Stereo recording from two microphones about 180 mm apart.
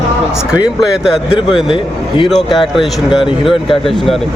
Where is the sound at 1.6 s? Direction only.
25° left (ahead or behind).